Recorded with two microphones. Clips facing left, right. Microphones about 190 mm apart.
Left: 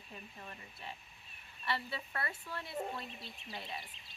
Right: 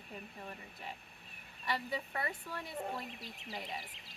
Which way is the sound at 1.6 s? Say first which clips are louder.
Right 2 dB; 15° right (ahead or behind).